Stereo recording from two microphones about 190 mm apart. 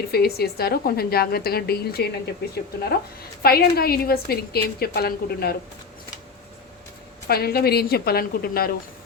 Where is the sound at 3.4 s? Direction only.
55° left (ahead or behind).